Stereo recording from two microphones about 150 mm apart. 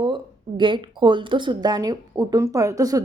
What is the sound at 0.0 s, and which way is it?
A woman's voice, 30° right (ahead or behind).